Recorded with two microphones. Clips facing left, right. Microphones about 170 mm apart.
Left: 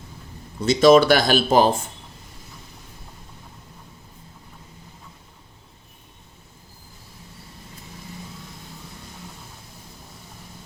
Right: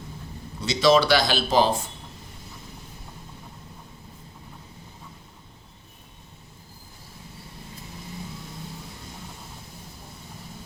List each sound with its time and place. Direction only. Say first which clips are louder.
0.6 s speech: left 6 dB; 50° left (ahead or behind)